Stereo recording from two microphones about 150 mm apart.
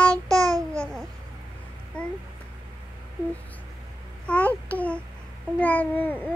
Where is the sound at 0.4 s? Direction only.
25° right (ahead or behind).